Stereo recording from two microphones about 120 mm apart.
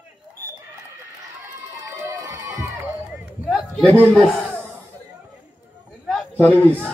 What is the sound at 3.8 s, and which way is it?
Speech, 15° left (ahead or behind).